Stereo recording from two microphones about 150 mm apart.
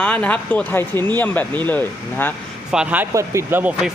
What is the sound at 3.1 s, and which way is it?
Speech, 20° right (ahead or behind).